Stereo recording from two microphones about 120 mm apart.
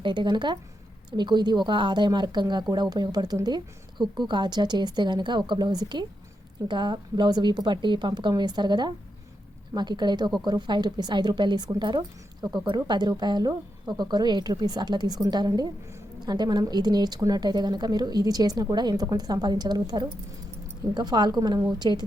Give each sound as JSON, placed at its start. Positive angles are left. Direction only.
{"t": 0.0, "sound": "a woman's voice", "side_deg": -40}